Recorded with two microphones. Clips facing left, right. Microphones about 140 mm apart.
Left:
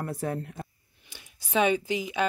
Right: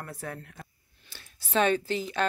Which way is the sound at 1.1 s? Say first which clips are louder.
Left 1 dB; 15° left (ahead or behind).